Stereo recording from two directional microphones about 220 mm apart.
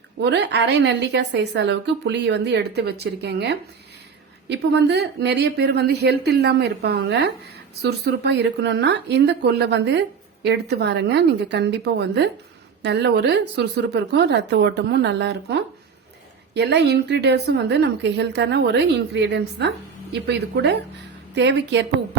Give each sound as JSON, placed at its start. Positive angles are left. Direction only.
{"t": 0.2, "sound": "speech", "side_deg": -50}